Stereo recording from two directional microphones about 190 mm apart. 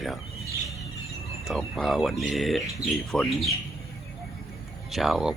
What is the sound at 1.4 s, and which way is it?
Speech, centre (ahead or behind).